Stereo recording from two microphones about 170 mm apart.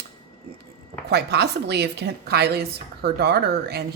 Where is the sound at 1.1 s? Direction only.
75° right (ahead or behind).